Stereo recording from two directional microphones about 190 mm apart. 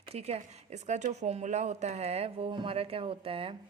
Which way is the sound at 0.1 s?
35° right (ahead or behind).